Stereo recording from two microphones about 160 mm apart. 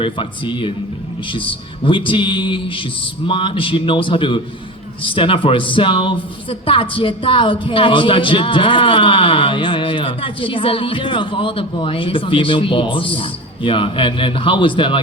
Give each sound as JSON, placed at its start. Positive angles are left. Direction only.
{"t": 0.0, "sound": "a woman's voice", "side_deg": 30}